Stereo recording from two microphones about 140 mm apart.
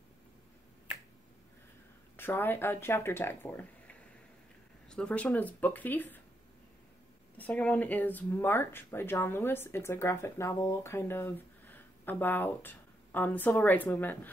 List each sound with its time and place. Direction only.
2.1 s speech: 15° left (ahead or behind)
7.3 s speech: 10° left (ahead or behind)